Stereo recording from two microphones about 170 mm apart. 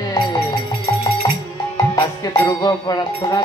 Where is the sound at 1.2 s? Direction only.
20° left (ahead or behind).